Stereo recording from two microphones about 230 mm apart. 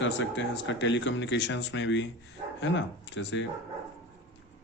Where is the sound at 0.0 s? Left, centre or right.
Left.